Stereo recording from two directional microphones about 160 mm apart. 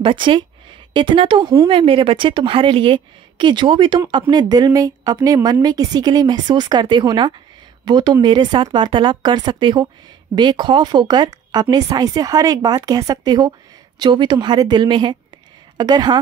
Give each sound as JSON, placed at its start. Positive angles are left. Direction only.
{"t": 0.0, "sound": "a woman's voice", "side_deg": -30}